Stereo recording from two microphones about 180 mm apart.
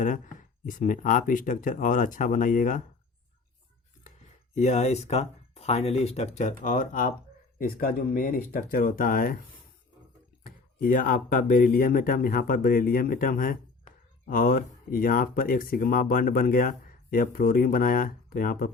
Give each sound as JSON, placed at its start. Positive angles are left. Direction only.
{"t": 0.0, "sound": "speech", "side_deg": 45}
{"t": 4.5, "sound": "speech", "side_deg": 40}
{"t": 10.4, "sound": "speech", "side_deg": 50}